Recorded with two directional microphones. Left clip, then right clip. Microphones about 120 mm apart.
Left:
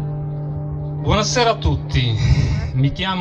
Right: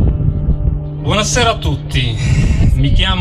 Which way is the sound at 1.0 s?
10° left (ahead or behind).